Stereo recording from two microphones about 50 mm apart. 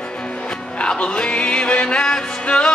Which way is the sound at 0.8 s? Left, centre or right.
Left.